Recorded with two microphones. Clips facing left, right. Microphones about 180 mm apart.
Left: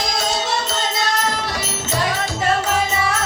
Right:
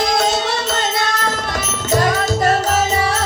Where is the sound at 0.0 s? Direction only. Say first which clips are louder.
Right 5 dB; 60° right (ahead or behind).